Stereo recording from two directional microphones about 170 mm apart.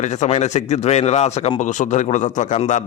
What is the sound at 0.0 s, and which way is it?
A man's voice, 40° left (ahead or behind).